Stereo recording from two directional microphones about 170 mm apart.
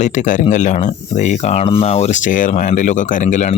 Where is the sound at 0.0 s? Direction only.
45° left (ahead or behind).